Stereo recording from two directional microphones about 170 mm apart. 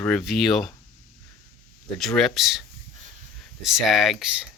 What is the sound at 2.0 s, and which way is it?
Speech, centre (ahead or behind).